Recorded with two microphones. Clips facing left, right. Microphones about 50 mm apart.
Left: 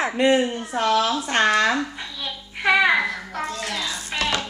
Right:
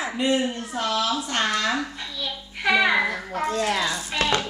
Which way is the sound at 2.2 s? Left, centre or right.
Centre.